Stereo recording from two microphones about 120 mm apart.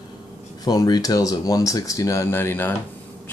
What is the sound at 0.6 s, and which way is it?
Speech, 35° left (ahead or behind).